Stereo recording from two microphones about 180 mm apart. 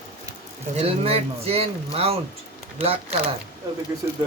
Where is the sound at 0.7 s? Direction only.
35° right (ahead or behind).